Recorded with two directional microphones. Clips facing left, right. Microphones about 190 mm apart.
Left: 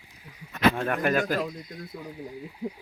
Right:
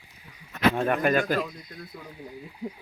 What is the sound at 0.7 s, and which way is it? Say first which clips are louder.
Speech: right 2 dB; 5° right (ahead or behind).